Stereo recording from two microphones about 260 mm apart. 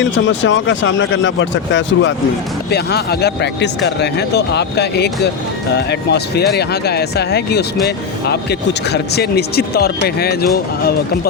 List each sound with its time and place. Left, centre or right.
0.0 s speech: left